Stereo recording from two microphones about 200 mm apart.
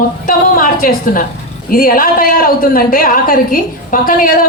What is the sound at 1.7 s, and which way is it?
A woman's voice, 45° left (ahead or behind).